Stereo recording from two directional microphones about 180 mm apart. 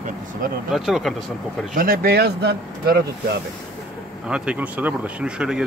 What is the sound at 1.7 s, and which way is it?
Speech, 55° right (ahead or behind).